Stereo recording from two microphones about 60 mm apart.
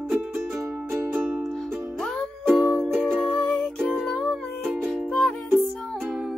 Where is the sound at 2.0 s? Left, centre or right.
Centre.